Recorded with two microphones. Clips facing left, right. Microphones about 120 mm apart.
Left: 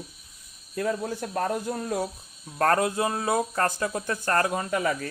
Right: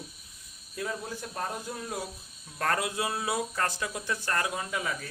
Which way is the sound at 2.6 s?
40° left (ahead or behind).